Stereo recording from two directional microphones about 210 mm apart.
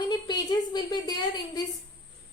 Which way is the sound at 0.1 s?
20° left (ahead or behind).